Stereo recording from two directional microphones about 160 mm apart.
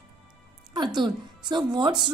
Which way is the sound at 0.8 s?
30° right (ahead or behind).